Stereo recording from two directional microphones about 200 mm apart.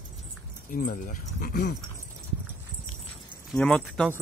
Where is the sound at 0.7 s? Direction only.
45° left (ahead or behind).